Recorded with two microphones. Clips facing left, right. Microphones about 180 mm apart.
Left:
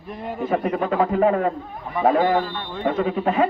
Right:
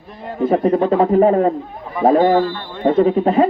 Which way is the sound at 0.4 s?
30° right (ahead or behind).